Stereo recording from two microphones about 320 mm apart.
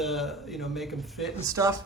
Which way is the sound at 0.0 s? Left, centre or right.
Centre.